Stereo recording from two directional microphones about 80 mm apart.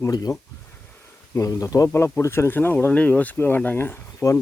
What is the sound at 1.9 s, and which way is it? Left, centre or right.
Speech, left.